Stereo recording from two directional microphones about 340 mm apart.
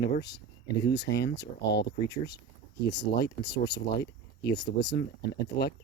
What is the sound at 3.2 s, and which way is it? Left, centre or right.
Speech, left.